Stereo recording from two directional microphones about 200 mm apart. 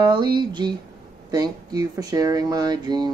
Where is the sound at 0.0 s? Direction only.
20° right (ahead or behind).